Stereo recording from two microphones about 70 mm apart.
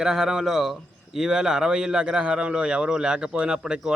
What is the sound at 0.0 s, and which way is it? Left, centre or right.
Speech, centre.